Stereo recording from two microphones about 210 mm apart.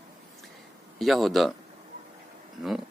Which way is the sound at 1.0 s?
Centre (ahead or behind).